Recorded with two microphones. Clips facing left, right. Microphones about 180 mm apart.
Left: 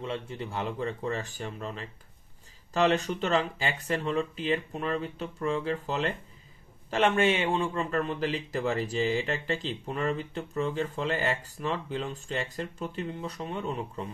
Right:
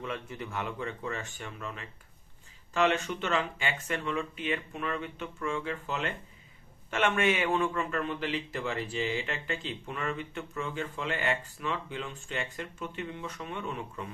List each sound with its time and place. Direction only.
0.0 s speech: 30° left (ahead or behind)